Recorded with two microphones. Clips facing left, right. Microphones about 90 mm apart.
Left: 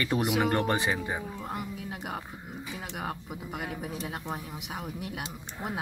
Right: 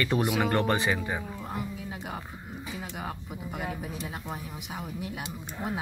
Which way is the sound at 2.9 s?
15° left (ahead or behind).